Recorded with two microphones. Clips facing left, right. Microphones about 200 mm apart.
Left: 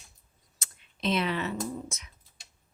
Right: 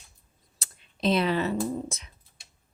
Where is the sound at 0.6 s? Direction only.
35° right (ahead or behind).